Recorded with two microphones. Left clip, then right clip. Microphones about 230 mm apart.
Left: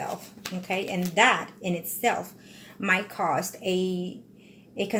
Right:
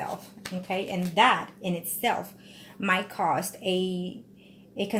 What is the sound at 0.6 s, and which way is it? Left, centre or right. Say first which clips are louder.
A woman's voice: left 1 dB; centre.